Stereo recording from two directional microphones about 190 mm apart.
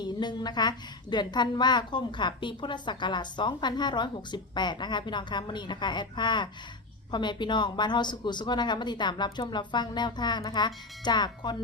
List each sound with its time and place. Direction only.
0.0 s a woman's voice: 20° left (ahead or behind)